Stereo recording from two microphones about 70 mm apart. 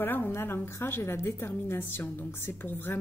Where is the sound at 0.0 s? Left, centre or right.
Left.